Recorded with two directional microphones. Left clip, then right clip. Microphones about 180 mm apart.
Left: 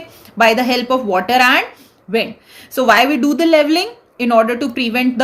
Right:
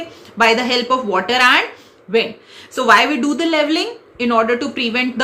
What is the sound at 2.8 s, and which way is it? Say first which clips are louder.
A woman's voice: left 1 dB; 50° left (ahead or behind).